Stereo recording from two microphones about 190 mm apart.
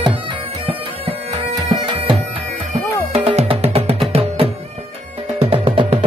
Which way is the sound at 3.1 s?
35° right (ahead or behind).